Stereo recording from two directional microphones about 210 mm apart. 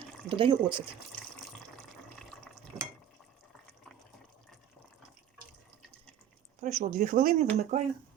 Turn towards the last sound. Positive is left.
turn(degrees=-40)  # may be behind; listen again after turning